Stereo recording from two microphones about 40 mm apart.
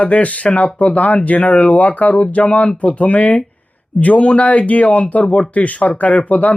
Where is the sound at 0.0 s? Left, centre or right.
Left.